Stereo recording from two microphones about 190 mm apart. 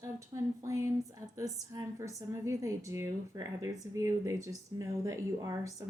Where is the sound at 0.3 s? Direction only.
15° right (ahead or behind).